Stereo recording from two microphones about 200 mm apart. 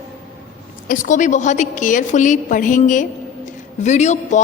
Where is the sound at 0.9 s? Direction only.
40° left (ahead or behind).